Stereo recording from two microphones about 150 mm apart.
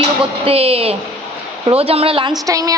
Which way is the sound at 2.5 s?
25° right (ahead or behind).